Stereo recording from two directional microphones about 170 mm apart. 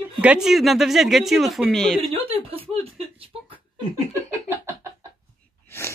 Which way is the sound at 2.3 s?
35° right (ahead or behind).